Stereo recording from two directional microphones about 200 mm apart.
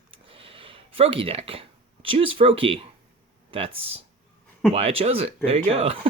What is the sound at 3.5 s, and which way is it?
Speech, 30° right (ahead or behind).